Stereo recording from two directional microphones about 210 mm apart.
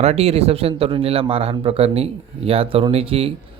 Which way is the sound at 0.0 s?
30° right (ahead or behind).